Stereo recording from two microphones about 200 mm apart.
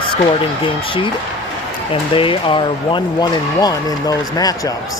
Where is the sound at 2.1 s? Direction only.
25° left (ahead or behind).